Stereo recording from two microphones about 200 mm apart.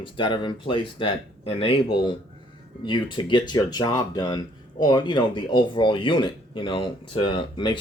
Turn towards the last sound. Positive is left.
turn(degrees=25)  # may be behind; listen again after turning